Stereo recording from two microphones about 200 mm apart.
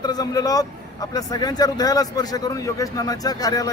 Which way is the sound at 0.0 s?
20° left (ahead or behind).